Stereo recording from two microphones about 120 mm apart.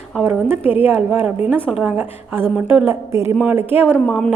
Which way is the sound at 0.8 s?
15° right (ahead or behind).